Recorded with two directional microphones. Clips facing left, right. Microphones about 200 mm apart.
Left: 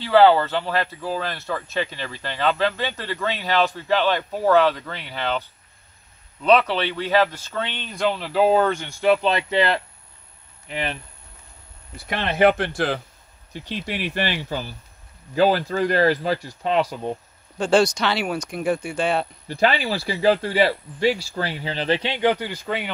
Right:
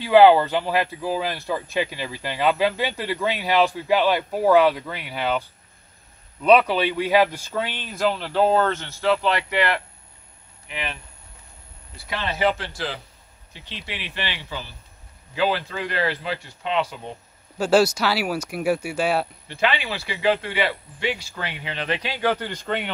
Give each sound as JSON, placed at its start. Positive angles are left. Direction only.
{"t": 0.0, "sound": "speech", "side_deg": -15}
{"t": 6.4, "sound": "speech", "side_deg": -10}
{"t": 10.7, "sound": "speech", "side_deg": 40}
{"t": 12.1, "sound": "speech", "side_deg": 55}
{"t": 17.6, "sound": "speech", "side_deg": -5}
{"t": 19.4, "sound": "speech", "side_deg": 40}
{"t": 22.5, "sound": "speech", "side_deg": 5}